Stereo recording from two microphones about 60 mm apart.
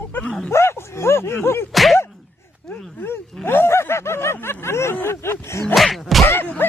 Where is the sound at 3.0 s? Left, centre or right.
Left.